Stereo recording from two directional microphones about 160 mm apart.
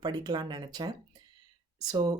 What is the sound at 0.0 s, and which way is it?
Speech, 25° right (ahead or behind).